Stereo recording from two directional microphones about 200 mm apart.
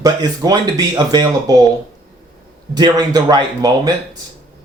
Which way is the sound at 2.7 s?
20° right (ahead or behind).